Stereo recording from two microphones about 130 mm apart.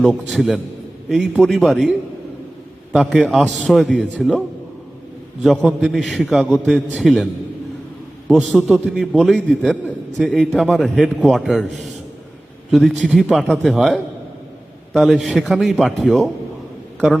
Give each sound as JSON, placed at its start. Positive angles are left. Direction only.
{"t": 0.0, "sound": "a man's voice", "side_deg": 0}
{"t": 8.3, "sound": "a man's voice", "side_deg": 0}